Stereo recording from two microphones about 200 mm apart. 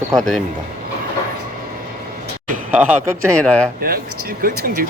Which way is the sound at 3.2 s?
5° left (ahead or behind).